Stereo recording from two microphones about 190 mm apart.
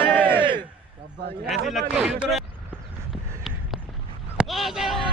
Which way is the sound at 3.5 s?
Centre (ahead or behind).